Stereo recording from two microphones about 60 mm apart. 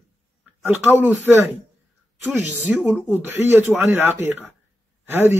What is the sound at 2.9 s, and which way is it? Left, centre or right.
Speech, right.